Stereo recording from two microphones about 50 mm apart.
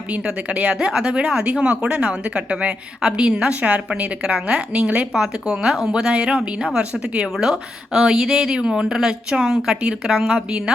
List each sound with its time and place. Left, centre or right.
0.1 s a woman's voice: right
5.1 s a woman's voice: centre